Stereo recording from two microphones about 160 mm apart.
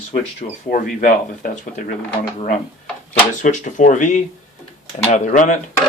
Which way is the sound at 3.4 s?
50° left (ahead or behind).